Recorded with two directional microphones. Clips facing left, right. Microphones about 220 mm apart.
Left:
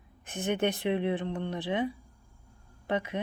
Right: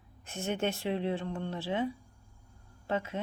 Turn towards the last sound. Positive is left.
turn(degrees=15)  # may be behind; listen again after turning